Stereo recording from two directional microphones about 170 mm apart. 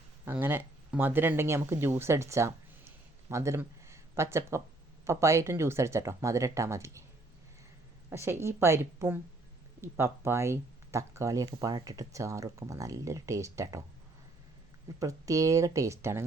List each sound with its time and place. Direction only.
0.3 s speech: 10° right (ahead or behind)
8.1 s speech: 15° right (ahead or behind)
14.9 s speech: 20° right (ahead or behind)